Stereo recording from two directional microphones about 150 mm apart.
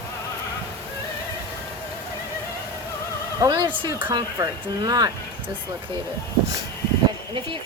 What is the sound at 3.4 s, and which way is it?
Speech, 25° right (ahead or behind).